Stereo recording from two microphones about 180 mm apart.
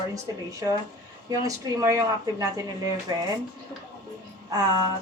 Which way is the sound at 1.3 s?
20° right (ahead or behind).